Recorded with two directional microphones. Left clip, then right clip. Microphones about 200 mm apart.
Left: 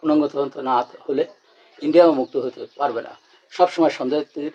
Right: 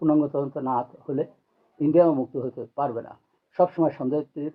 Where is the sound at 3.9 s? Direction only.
50° left (ahead or behind).